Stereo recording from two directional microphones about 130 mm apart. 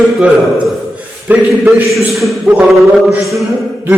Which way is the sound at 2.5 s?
10° right (ahead or behind).